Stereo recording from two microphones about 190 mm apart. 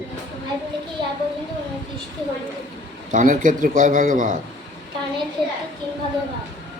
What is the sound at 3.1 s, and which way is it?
A man's voice, 45° right (ahead or behind).